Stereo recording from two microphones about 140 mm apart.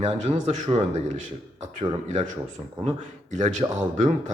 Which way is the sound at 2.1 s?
60° right (ahead or behind).